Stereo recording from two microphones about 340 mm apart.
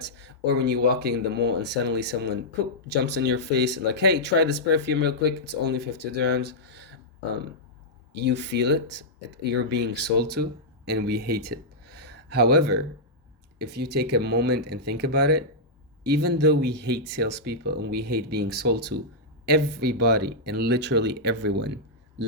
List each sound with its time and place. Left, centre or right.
0.0 s speech: right
8.1 s speech: right